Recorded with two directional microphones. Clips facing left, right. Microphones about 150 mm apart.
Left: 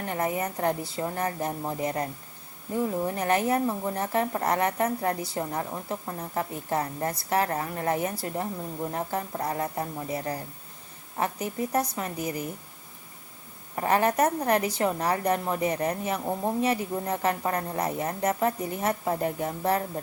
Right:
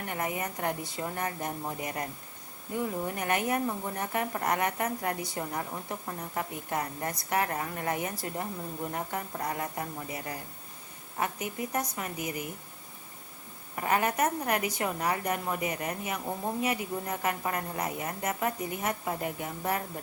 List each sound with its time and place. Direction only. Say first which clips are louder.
0.0 s a woman's voice: left 5 dB; 30° left (ahead or behind)
13.7 s a woman's voice: left 4 dB; 35° left (ahead or behind)